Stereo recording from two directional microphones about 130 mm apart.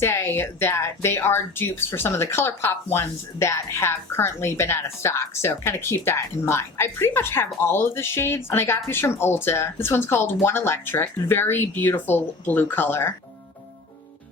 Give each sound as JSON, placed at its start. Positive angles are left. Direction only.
{"t": 0.0, "sound": "speech", "side_deg": 20}